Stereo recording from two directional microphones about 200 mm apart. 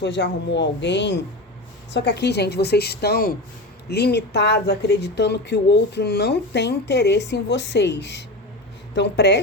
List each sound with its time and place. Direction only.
0.0 s speech: 60° left (ahead or behind)